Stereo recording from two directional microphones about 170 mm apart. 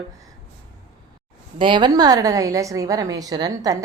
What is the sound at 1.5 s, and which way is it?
A woman's voice, 30° right (ahead or behind).